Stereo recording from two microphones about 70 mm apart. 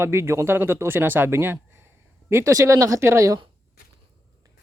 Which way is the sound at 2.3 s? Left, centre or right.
Right.